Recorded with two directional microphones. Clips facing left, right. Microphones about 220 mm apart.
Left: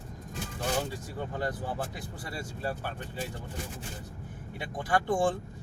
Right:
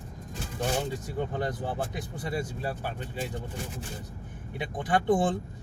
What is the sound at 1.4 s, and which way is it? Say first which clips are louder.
Speech: right 2 dB; 20° right (ahead or behind).